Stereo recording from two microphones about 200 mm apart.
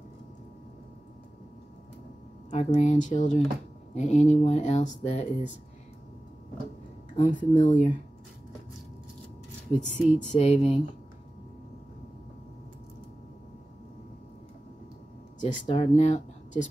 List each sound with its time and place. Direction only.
2.5 s speech: 35° left (ahead or behind)
7.2 s speech: 40° left (ahead or behind)
9.7 s speech: 30° left (ahead or behind)
15.4 s speech: 30° left (ahead or behind)